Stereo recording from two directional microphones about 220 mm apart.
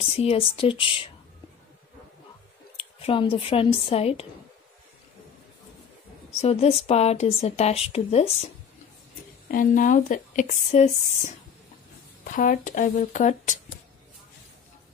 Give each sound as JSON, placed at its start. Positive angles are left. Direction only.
{"t": 0.0, "sound": "speech", "side_deg": 25}
{"t": 2.8, "sound": "speech", "side_deg": 25}
{"t": 6.4, "sound": "speech", "side_deg": 25}
{"t": 9.5, "sound": "speech", "side_deg": 35}
{"t": 12.3, "sound": "speech", "side_deg": 40}